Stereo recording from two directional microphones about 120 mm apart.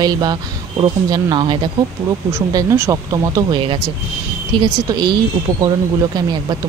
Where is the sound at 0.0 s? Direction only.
35° right (ahead or behind).